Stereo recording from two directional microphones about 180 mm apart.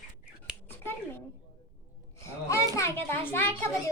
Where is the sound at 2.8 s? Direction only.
15° left (ahead or behind).